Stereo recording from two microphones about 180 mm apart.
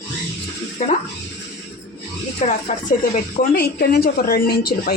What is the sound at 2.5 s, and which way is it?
Speech, 45° left (ahead or behind).